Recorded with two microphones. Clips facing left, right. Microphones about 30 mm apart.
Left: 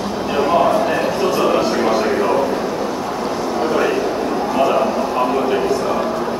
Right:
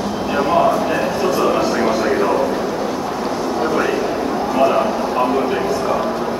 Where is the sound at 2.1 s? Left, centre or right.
Centre.